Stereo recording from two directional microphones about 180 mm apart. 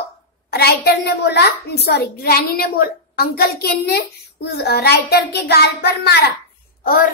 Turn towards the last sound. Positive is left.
turn(degrees=55)  # may be behind; listen again after turning